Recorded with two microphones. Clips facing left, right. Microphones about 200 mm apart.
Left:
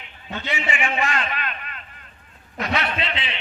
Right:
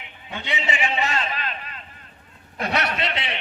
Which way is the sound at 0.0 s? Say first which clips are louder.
Left 2 dB; 15° right (ahead or behind).